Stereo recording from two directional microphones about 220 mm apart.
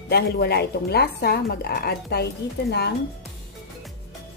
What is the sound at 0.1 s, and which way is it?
A woman's voice, 45° left (ahead or behind).